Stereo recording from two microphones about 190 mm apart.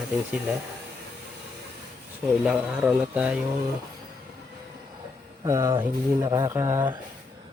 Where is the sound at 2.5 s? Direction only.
5° right (ahead or behind).